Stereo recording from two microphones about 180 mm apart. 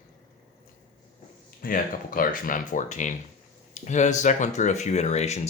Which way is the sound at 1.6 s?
50° left (ahead or behind).